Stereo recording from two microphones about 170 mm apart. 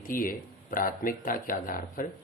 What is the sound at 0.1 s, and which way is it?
Speech, 55° left (ahead or behind).